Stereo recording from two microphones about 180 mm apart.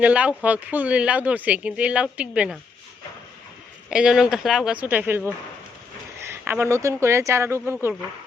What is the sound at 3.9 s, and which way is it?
Speech, 5° right (ahead or behind).